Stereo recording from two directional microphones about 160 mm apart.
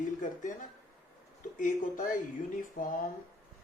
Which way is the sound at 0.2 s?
55° left (ahead or behind).